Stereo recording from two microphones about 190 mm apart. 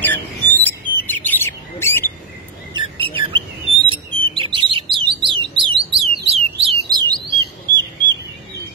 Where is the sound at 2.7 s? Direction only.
25° right (ahead or behind).